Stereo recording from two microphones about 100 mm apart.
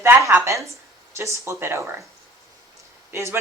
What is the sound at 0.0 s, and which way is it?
Speech, 25° right (ahead or behind).